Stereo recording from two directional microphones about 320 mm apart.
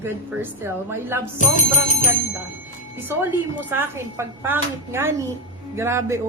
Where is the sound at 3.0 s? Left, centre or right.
Centre.